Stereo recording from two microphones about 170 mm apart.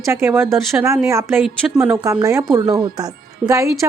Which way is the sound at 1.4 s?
Centre (ahead or behind).